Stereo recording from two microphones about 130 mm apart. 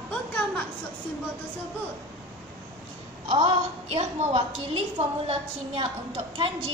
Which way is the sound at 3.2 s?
50° right (ahead or behind).